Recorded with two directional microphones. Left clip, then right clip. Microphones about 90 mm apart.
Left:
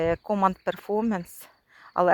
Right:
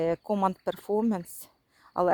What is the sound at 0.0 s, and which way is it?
Speech, 25° right (ahead or behind).